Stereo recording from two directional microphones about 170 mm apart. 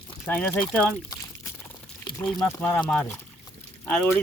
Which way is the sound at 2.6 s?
5° left (ahead or behind).